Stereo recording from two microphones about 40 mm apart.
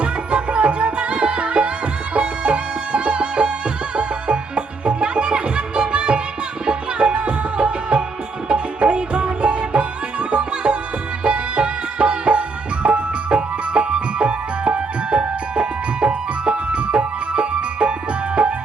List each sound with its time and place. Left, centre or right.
0.0 s music: right